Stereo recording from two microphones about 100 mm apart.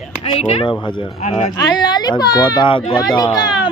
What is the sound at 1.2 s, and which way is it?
Speech, 90° left.